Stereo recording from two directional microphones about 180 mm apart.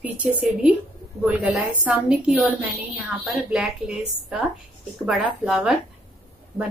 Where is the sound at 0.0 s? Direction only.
10° right (ahead or behind).